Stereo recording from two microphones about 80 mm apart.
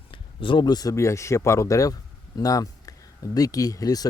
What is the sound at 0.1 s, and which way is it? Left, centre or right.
Speech, left.